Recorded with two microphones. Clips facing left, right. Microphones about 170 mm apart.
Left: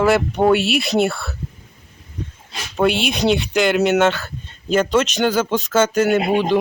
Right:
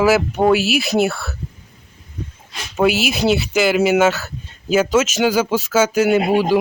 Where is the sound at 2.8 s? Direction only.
5° right (ahead or behind).